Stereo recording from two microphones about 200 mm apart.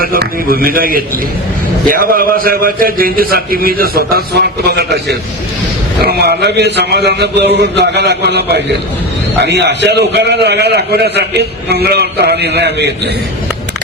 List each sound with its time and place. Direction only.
0.0 s a man's voice: 50° right (ahead or behind)
6.0 s a man's voice: 55° right (ahead or behind)